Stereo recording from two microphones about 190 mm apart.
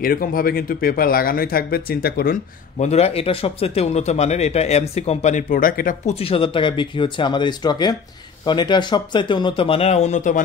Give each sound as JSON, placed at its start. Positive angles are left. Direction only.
{"t": 0.0, "sound": "speech", "side_deg": 50}
{"t": 2.8, "sound": "speech", "side_deg": 35}
{"t": 6.1, "sound": "speech", "side_deg": 30}